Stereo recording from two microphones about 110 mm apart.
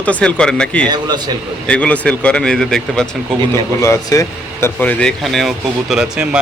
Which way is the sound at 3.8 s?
30° left (ahead or behind).